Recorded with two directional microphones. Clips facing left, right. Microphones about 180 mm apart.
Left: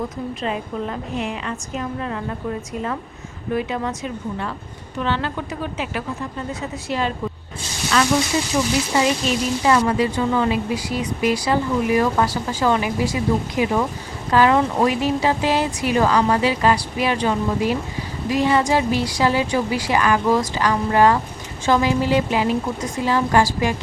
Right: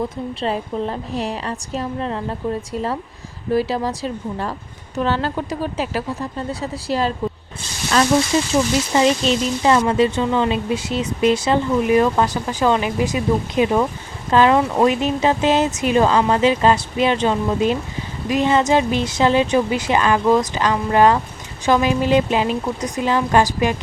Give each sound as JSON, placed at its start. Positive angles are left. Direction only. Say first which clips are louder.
{"t": 0.4, "sound": "speech", "louder": "right 4 dB", "side_deg": -35}
{"t": 3.5, "sound": "speech", "louder": "right 4 dB", "side_deg": -35}
{"t": 8.3, "sound": "a woman's voice", "louder": "right 3 dB", "side_deg": -25}